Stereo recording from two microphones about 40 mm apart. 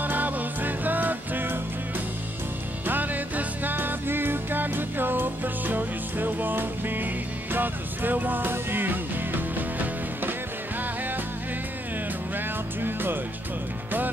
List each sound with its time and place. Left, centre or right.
0.0 s music: right
2.9 s music: right
12.4 s music: right